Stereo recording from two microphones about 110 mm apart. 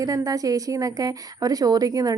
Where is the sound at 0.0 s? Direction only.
30° right (ahead or behind).